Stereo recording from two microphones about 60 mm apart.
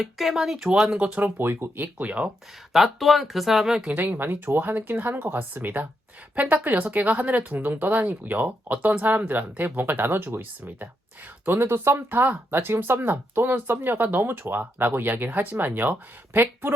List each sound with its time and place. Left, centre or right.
0.0 s speech: centre
0.9 s speech: right
1.2 s speech: right
2.7 s speech: centre
3.9 s speech: right